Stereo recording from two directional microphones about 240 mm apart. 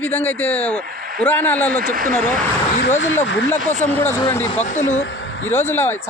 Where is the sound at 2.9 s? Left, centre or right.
Left.